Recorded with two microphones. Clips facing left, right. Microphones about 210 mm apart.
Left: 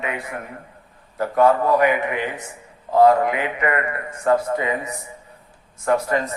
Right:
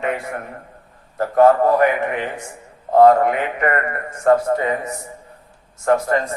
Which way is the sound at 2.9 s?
50° right (ahead or behind).